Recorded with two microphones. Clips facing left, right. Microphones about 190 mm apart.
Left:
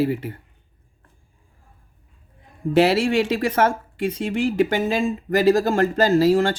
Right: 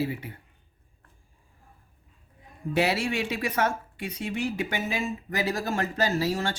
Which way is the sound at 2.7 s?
90° left.